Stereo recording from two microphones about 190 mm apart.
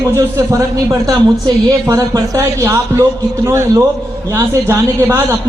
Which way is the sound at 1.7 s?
15° right (ahead or behind).